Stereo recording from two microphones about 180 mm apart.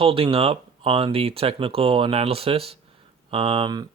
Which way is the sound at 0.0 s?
30° right (ahead or behind).